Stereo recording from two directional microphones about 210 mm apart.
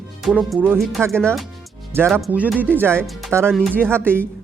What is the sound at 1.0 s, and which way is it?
Speech, 5° left (ahead or behind).